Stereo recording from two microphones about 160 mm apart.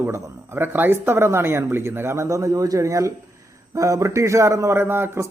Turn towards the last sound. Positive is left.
turn(degrees=-15)  # may be behind; listen again after turning